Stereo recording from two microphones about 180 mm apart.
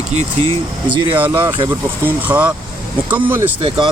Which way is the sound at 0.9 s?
10° right (ahead or behind).